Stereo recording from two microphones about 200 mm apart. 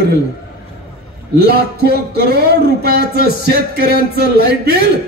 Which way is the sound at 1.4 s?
55° right (ahead or behind).